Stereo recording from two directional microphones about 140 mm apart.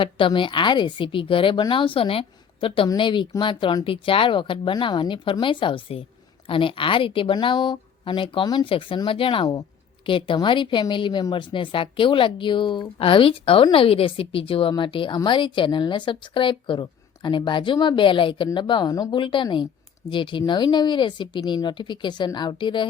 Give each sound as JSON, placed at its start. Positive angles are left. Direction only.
{"t": 0.0, "sound": "a woman's voice", "side_deg": 40}